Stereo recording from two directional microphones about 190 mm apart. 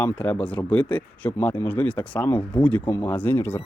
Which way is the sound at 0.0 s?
10° left (ahead or behind).